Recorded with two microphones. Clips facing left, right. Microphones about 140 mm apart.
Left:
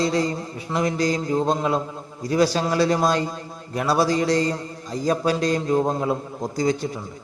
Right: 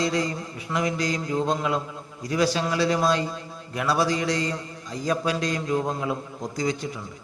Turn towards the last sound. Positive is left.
turn(degrees=35)  # may be behind; listen again after turning